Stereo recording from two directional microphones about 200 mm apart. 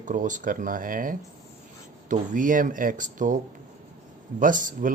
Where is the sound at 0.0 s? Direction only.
40° right (ahead or behind).